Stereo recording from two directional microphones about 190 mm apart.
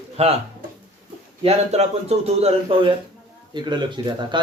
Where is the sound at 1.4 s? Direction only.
35° right (ahead or behind).